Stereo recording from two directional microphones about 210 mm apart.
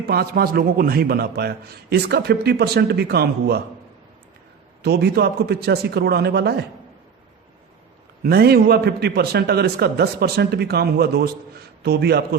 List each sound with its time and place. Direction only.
0.0 s a man's voice: 45° right (ahead or behind)
4.8 s a man's voice: 50° right (ahead or behind)
8.2 s a man's voice: 50° right (ahead or behind)